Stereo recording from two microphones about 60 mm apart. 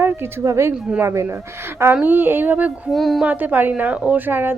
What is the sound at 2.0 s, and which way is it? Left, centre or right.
Speech, right.